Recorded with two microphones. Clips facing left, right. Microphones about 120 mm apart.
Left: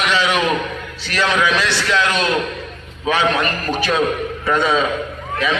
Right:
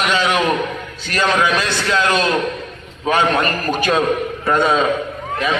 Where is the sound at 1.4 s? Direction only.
45° right (ahead or behind).